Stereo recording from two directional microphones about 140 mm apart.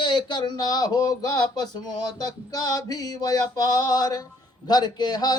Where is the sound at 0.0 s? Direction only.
35° left (ahead or behind).